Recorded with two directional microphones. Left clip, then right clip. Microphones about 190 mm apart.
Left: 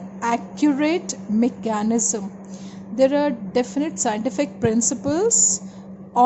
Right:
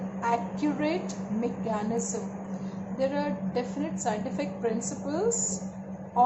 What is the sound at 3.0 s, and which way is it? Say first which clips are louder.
A woman's voice: left 11 dB; 60° left (ahead or behind).